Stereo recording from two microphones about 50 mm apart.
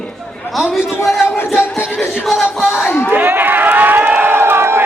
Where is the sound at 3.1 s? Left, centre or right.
Right.